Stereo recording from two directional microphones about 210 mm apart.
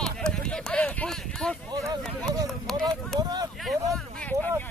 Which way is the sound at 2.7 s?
Centre (ahead or behind).